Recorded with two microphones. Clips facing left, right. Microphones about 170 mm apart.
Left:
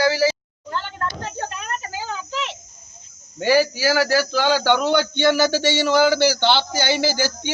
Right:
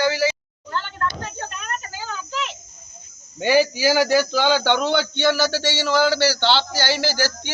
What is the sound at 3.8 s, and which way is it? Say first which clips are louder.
A man's voice: right 1 dB; centre (ahead or behind).